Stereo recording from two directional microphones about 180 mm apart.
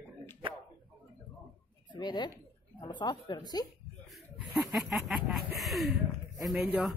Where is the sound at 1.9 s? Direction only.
25° left (ahead or behind).